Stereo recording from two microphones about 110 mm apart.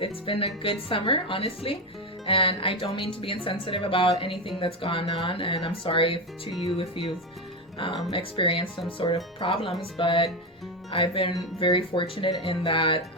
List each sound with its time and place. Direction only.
0.0 s a woman's voice: 55° left (ahead or behind)
6.5 s speech: centre (ahead or behind)
6.7 s speech: 50° left (ahead or behind)
9.8 s speech: 50° left (ahead or behind)